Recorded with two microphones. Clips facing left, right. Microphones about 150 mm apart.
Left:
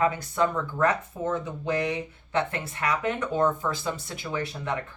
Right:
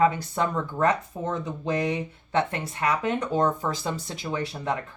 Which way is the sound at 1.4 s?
30° right (ahead or behind).